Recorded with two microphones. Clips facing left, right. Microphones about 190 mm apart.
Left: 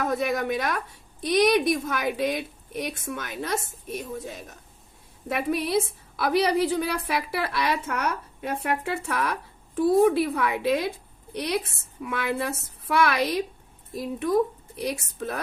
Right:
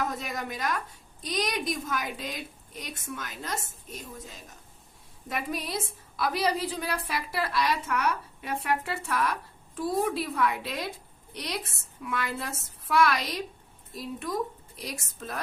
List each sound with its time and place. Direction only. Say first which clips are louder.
0.1 s a woman's voice: left 10 dB; 65° left (ahead or behind)
5.3 s a woman's voice: left 8 dB; 60° left (ahead or behind)